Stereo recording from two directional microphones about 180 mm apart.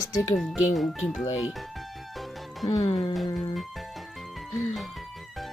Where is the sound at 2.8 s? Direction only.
35° left (ahead or behind).